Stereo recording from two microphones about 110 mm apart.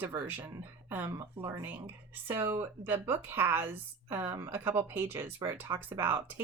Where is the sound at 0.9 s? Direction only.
20° right (ahead or behind).